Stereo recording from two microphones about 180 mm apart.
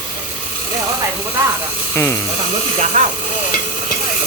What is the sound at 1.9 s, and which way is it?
Speech, 15° left (ahead or behind).